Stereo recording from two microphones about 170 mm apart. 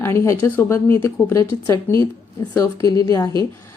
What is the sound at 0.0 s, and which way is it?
A woman's voice, 15° left (ahead or behind).